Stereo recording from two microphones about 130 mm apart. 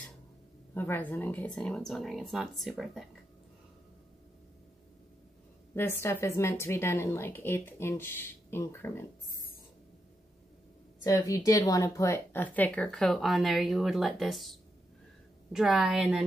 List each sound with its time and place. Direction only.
0.7 s speech: 15° left (ahead or behind); by 3.1 s centre (ahead or behind)
5.8 s speech: 20° left (ahead or behind)
11.1 s speech: 25° left (ahead or behind); by 16.3 s 5° right (ahead or behind)